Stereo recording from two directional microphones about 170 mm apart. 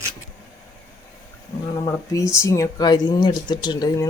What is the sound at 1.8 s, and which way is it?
Speech, 15° left (ahead or behind).